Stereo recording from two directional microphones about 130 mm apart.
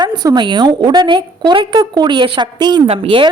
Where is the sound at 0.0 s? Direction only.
35° right (ahead or behind).